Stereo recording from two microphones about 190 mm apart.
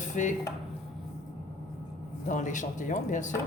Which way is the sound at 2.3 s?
40° left (ahead or behind).